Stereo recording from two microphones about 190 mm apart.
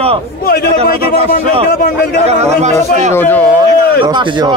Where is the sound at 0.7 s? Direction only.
35° right (ahead or behind).